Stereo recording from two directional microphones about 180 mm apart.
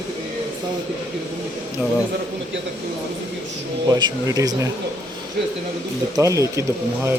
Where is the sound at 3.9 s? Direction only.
25° right (ahead or behind).